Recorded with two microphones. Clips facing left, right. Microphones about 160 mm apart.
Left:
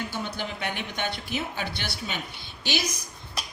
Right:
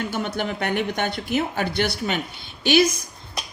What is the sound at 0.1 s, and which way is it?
Speech, 55° right (ahead or behind).